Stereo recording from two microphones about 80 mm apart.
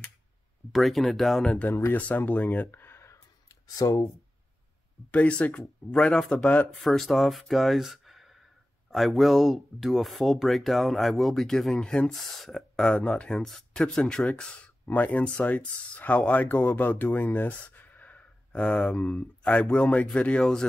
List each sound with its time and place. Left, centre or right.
0.7 s speech: centre
1.7 s speech: left
2.0 s speech: centre
3.7 s speech: left
5.1 s speech: centre
6.3 s speech: left
6.8 s speech: centre
18.6 s speech: centre
18.9 s speech: centre